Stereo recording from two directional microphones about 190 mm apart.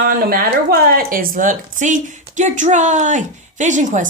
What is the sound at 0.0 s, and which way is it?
Speech, 50° right (ahead or behind).